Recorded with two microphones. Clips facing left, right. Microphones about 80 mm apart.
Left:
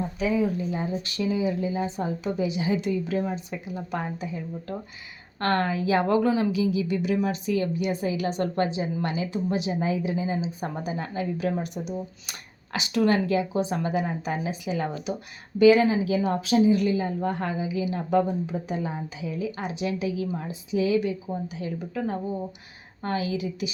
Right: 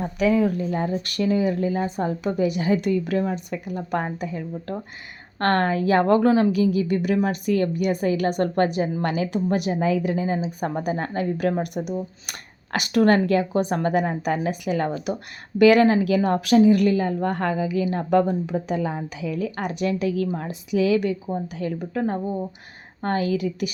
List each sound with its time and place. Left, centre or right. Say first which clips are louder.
0.0 s speech: right 5 dB; right
15.5 s speech: right 3 dB; right
21.6 s speech: right 6 dB; right